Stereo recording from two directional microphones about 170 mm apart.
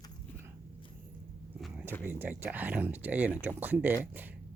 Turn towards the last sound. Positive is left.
turn(degrees=-10)  # may be behind; listen again after turning